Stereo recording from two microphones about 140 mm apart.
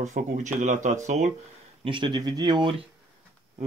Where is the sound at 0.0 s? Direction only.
60° right (ahead or behind).